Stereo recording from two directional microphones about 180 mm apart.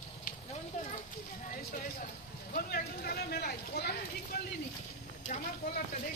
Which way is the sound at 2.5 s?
55° left (ahead or behind).